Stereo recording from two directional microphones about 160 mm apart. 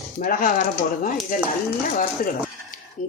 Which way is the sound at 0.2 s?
55° left (ahead or behind).